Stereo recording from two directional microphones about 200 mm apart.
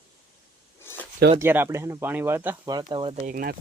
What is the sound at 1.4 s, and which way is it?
Speech, 10° right (ahead or behind).